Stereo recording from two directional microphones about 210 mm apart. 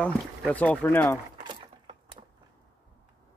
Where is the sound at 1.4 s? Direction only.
20° right (ahead or behind).